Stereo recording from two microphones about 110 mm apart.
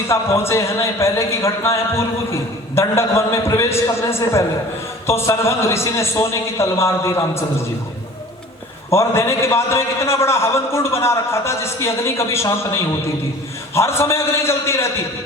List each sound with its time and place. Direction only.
0.1 s speech: 25° left (ahead or behind)
8.9 s speech: 25° left (ahead or behind)